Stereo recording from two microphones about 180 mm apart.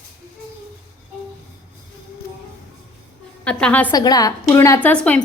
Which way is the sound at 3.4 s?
5° left (ahead or behind).